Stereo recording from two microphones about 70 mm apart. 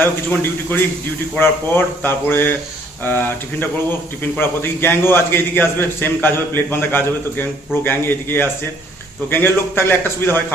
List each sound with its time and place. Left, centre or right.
0.0 s speech: left